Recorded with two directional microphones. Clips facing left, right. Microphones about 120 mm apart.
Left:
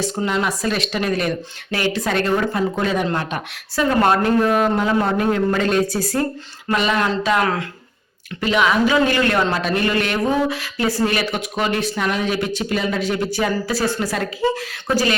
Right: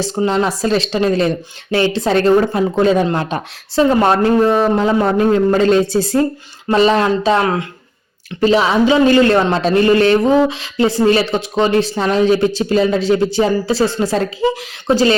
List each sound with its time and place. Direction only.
0.2 s a man's voice: 25° right (ahead or behind)
8.4 s a man's voice: 35° right (ahead or behind)
14.4 s a man's voice: 15° right (ahead or behind)